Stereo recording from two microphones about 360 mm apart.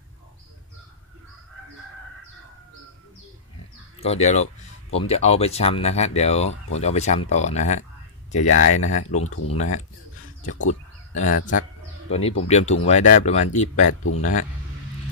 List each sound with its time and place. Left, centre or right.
4.0 s speech: centre
9.2 s speech: left
9.5 s speech: centre
14.0 s speech: left